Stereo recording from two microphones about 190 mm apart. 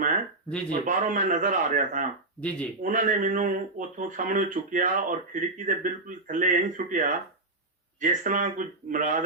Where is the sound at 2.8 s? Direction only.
45° right (ahead or behind).